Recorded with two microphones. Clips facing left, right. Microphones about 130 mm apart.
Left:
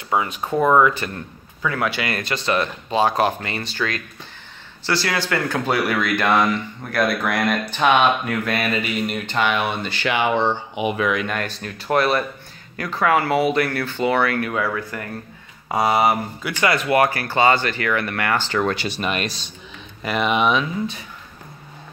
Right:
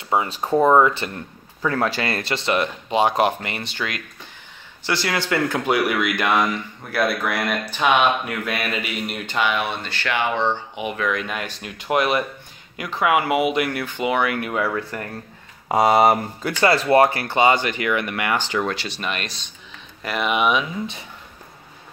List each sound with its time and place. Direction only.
0.1 s speech: 25° right (ahead or behind)
1.7 s speech: 35° right (ahead or behind); by 9.8 s centre (ahead or behind)
9.8 s speech: 15° left (ahead or behind)
11.1 s speech: centre (ahead or behind)
11.4 s speech: 15° right (ahead or behind)
15.7 s speech: 50° right (ahead or behind)
16.6 s speech: 30° right (ahead or behind); by 18.6 s 15° right (ahead or behind)
18.6 s speech: centre (ahead or behind)